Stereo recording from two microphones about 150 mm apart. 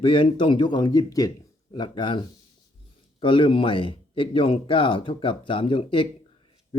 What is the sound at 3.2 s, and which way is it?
Speech, 35° left (ahead or behind).